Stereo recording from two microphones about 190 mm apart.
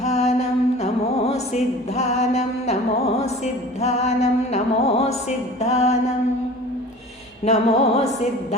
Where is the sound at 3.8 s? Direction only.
35° left (ahead or behind).